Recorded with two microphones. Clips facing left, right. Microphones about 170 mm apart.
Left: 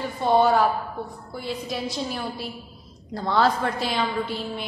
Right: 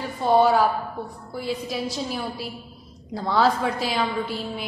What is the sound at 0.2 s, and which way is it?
A woman's voice, 5° right (ahead or behind).